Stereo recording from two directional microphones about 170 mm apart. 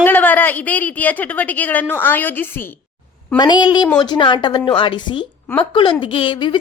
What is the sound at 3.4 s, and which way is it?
A woman's voice, 25° left (ahead or behind).